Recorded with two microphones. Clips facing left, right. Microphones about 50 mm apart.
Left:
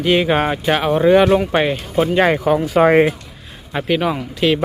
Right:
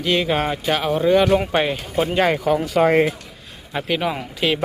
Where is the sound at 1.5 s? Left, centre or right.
Centre.